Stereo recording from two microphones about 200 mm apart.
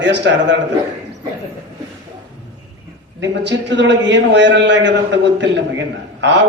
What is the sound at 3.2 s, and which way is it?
A man's voice, 65° right (ahead or behind).